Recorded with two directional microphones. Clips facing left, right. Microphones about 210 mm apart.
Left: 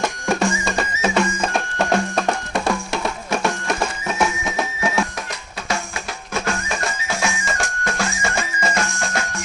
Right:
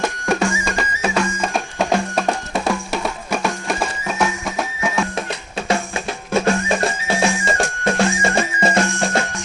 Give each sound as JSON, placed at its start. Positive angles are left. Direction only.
{"t": 0.0, "sound": "music", "side_deg": -5}
{"t": 6.4, "sound": "music", "side_deg": -30}